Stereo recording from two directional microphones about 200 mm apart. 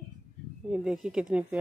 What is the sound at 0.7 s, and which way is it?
Speech, 5° right (ahead or behind).